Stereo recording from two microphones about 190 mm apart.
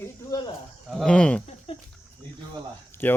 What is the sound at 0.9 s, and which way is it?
Speech, 5° left (ahead or behind).